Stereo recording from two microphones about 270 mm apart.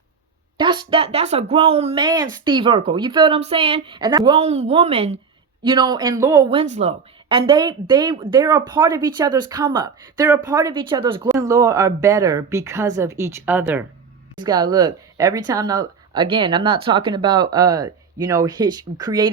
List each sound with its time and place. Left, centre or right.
0.5 s speech: centre